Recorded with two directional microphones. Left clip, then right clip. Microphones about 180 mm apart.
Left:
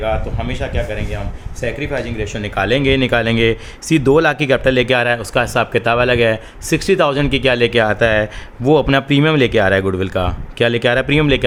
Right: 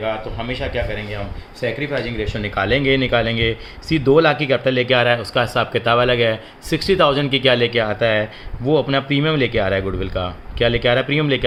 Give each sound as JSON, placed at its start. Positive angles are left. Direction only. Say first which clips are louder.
{"t": 0.0, "sound": "speech", "louder": "left 3 dB", "side_deg": 30}
{"t": 1.6, "sound": "speech", "louder": "left 1 dB", "side_deg": 25}